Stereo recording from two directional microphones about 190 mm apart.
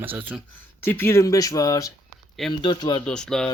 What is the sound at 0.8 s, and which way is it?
Speech, 10° left (ahead or behind).